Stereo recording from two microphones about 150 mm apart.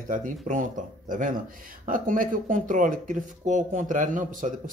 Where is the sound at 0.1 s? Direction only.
60° right (ahead or behind).